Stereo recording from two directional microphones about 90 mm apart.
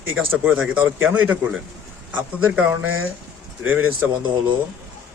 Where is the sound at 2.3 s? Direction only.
15° right (ahead or behind).